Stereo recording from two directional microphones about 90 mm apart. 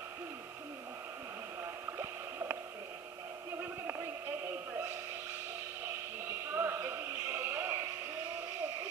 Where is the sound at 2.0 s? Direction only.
30° right (ahead or behind).